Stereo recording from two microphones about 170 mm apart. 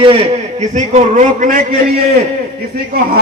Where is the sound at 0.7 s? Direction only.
45° right (ahead or behind).